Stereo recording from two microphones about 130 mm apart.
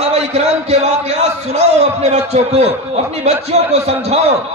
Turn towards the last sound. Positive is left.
turn(degrees=-55)  # may be behind; listen again after turning